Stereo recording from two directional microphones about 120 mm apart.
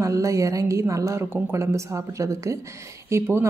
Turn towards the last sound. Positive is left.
turn(degrees=-20)  # may be behind; listen again after turning